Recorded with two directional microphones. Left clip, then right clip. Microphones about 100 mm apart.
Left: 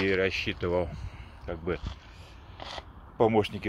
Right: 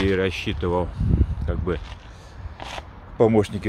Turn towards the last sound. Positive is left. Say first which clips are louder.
# right 6 dB
turn(degrees=-20)  # may be behind; listen again after turning